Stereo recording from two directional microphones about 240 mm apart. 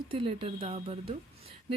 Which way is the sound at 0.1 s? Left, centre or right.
Right.